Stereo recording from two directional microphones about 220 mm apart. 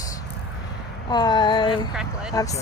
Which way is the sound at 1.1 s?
20° left (ahead or behind).